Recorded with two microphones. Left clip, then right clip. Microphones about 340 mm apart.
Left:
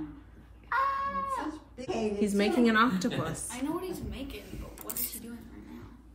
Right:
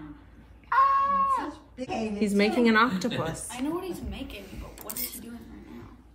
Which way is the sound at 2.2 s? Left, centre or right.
Right.